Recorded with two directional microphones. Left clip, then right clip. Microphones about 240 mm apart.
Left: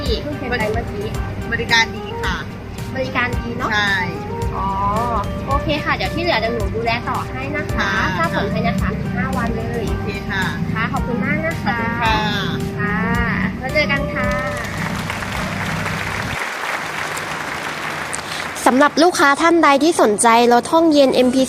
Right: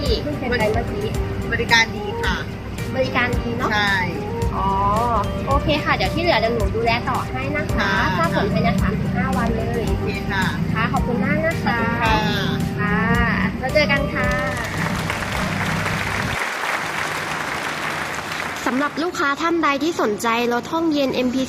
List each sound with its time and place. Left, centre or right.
1.5 s music: centre
3.0 s speech: centre
3.7 s speech: centre
4.9 s speech: centre
10.4 s speech: centre
12.0 s sheep: centre
12.9 s music: centre
13.7 s speech: centre
18.8 s speech: left